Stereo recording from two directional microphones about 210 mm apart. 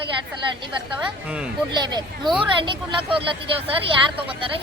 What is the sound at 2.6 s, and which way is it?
Speech, 25° right (ahead or behind).